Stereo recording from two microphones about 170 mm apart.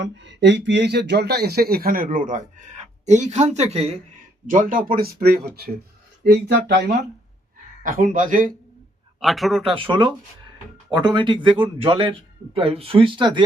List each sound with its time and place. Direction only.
0.0 s speech: 90° right; by 3.9 s 40° right (ahead or behind)
4.4 s speech: 50° right (ahead or behind); by 7.0 s 75° right (ahead or behind)
7.8 s a man's voice: 55° right (ahead or behind)
9.2 s speech: centre (ahead or behind)
9.7 s speech: 30° right (ahead or behind)